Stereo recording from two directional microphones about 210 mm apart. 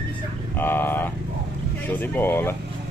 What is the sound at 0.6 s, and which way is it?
Vehicle, 10° left (ahead or behind).